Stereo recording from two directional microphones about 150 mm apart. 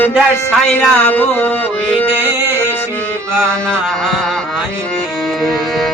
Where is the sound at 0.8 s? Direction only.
10° left (ahead or behind).